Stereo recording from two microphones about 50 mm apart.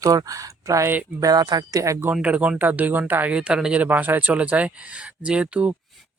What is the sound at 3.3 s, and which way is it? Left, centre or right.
Speech, centre.